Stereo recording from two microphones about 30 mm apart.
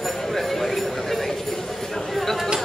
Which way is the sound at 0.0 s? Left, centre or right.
Centre.